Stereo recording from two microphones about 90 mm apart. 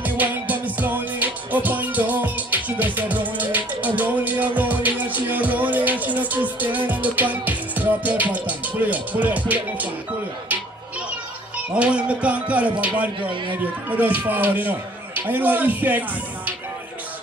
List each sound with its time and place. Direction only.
0.0 s music: 20° right (ahead or behind)
11.1 s speech: 15° right (ahead or behind)